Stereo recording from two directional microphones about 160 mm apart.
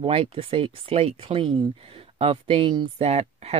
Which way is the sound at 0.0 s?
35° right (ahead or behind).